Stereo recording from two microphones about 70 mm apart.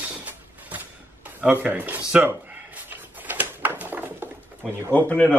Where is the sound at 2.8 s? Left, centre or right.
Right.